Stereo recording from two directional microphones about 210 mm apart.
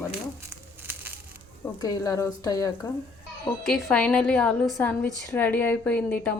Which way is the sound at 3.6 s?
5° left (ahead or behind).